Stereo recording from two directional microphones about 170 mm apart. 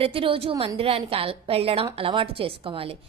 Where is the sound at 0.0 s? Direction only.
35° right (ahead or behind).